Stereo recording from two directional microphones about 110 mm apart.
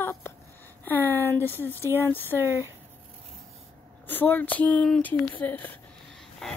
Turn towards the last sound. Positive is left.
turn(degrees=5)  # may be behind; listen again after turning